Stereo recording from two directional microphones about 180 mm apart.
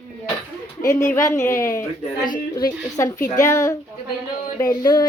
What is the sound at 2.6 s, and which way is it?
A woman's voice, 20° left (ahead or behind).